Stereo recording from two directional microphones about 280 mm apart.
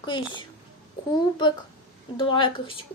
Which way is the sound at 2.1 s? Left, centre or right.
Centre.